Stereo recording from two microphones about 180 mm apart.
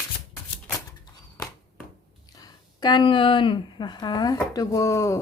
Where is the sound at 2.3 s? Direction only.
20° left (ahead or behind).